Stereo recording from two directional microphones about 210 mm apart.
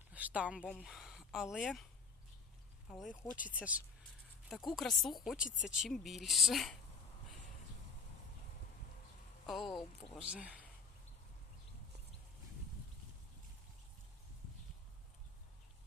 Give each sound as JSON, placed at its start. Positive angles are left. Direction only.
{"t": 0.1, "sound": "speech", "side_deg": -5}
{"t": 2.9, "sound": "speech", "side_deg": 0}
{"t": 5.4, "sound": "speech", "side_deg": 40}
{"t": 5.6, "sound": "speech", "side_deg": 0}
{"t": 9.7, "sound": "speech", "side_deg": 0}